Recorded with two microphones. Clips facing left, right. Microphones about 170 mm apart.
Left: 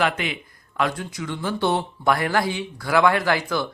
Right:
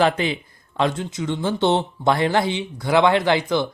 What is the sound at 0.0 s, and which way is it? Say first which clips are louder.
A man's voice: right 5 dB; 30° right (ahead or behind).